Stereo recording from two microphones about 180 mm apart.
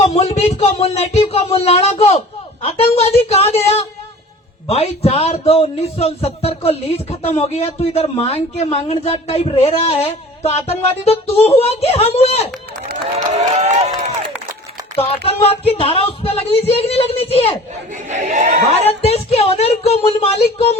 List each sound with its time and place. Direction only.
0.0 s speech: 40° left (ahead or behind)
13.1 s speech: 40° right (ahead or behind)
14.9 s speech: 35° left (ahead or behind)
17.9 s speech: 40° right (ahead or behind)
19.0 s speech: 35° left (ahead or behind)